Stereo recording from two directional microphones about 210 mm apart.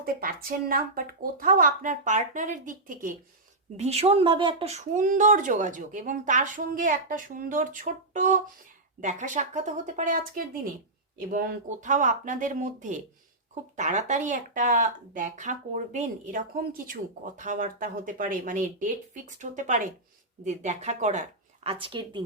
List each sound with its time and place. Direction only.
0.0 s speech: 45° right (ahead or behind); by 22.2 s 25° right (ahead or behind)